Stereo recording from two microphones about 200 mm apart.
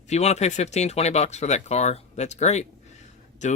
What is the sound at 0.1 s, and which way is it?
Speech, 35° left (ahead or behind).